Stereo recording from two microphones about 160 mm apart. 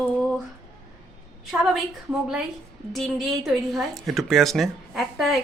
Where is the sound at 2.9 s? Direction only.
Centre (ahead or behind).